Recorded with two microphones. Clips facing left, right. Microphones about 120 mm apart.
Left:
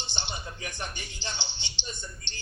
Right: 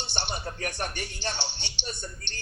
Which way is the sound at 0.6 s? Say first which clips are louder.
Right 5 dB; 65° right (ahead or behind).